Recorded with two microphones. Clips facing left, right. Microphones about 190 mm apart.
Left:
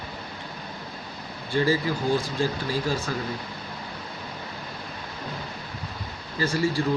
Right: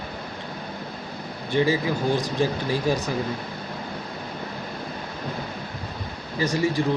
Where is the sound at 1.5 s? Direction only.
20° right (ahead or behind).